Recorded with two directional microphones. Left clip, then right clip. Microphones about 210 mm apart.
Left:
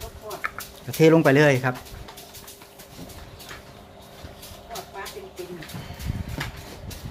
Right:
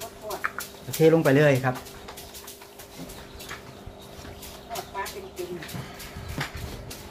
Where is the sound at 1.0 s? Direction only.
45° left (ahead or behind).